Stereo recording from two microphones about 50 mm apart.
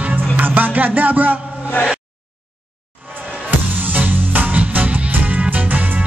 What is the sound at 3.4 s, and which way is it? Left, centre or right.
Music, right.